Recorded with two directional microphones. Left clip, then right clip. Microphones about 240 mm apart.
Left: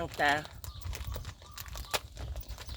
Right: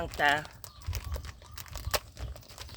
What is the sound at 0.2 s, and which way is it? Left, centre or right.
Speech, centre.